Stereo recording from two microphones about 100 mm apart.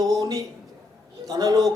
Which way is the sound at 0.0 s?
35° right (ahead or behind).